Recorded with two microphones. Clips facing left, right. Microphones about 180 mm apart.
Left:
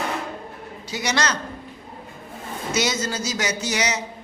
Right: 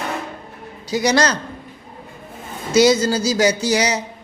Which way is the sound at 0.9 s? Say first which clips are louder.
Right 7 dB; 35° right (ahead or behind).